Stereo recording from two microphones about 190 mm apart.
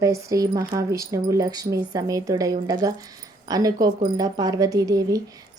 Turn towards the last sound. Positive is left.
turn(degrees=-20)  # may be behind; listen again after turning